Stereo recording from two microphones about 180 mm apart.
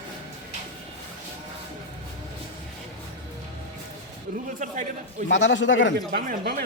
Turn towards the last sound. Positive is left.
turn(degrees=-55)  # may be behind; listen again after turning